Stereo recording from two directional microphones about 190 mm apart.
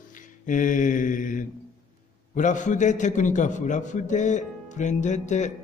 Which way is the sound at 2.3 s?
40° left (ahead or behind).